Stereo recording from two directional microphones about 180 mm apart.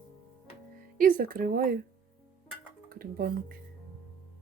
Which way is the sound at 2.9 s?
55° right (ahead or behind).